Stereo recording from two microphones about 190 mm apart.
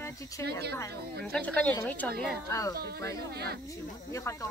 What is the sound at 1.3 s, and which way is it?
Speech, 5° left (ahead or behind).